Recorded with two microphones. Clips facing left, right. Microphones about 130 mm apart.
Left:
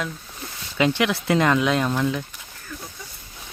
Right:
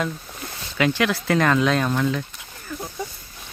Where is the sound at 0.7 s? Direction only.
20° left (ahead or behind).